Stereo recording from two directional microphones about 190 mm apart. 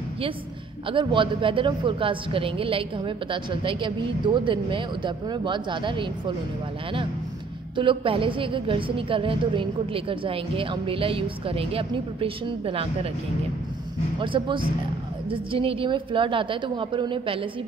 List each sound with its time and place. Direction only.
0.8 s a woman's voice: 25° right (ahead or behind)
7.7 s a woman's voice: 25° right (ahead or behind)
14.2 s a woman's voice: 25° right (ahead or behind)